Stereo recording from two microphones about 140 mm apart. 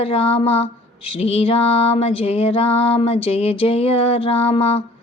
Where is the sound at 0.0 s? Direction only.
40° left (ahead or behind).